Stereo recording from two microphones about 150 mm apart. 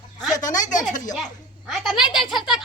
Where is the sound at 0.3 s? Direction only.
25° left (ahead or behind).